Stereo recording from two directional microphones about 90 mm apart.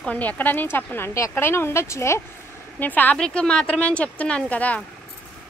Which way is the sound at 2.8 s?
20° left (ahead or behind).